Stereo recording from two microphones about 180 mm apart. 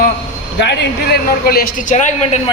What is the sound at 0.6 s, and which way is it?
Speech, 70° left (ahead or behind).